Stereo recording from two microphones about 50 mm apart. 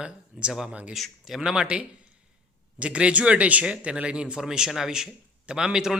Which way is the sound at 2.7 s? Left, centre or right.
Right.